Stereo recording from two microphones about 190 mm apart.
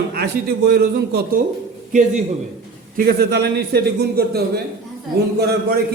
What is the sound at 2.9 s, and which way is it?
A man's voice, 55° right (ahead or behind).